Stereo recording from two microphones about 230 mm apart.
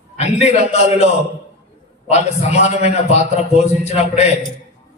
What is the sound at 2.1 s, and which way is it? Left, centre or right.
A man's voice, left.